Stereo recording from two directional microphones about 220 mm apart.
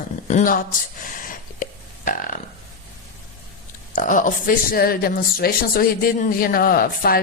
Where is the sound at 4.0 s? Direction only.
35° left (ahead or behind).